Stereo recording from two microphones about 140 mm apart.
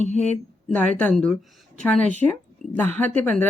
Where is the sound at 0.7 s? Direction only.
10° left (ahead or behind).